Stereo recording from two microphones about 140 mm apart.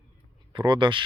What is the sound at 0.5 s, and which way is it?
Speech, 30° right (ahead or behind).